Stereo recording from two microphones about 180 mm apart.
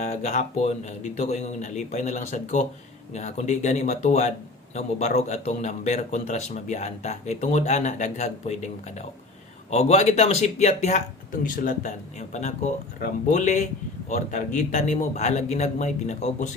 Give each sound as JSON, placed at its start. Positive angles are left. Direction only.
{"t": 0.0, "sound": "a man's voice", "side_deg": 40}